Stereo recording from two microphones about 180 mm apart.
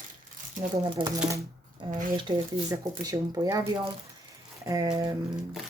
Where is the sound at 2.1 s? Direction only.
25° right (ahead or behind).